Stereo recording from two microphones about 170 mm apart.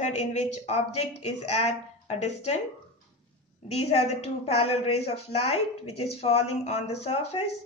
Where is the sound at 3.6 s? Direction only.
35° left (ahead or behind).